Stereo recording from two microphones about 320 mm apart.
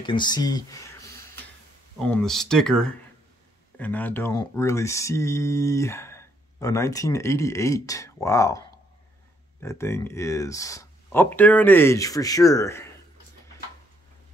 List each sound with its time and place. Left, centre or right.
0.0 s speech: centre